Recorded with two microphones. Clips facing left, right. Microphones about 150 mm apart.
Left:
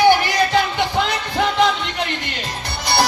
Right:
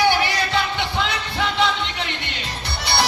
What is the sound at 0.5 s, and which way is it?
Music, 45° left (ahead or behind).